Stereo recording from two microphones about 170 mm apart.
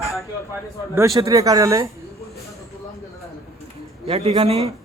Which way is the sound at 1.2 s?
20° right (ahead or behind).